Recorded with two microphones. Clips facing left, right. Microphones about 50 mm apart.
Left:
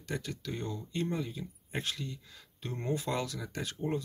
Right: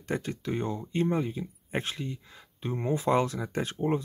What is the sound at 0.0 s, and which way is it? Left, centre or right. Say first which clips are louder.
Speech: right 6 dB; right.